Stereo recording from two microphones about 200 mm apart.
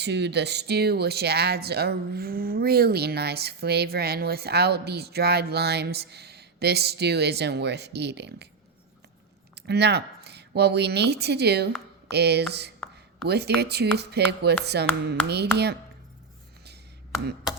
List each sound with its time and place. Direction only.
0.0 s speech: 60° right (ahead or behind)
9.6 s speech: 55° right (ahead or behind)